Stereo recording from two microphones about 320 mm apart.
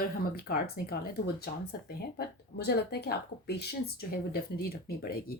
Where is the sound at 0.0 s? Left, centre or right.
Left.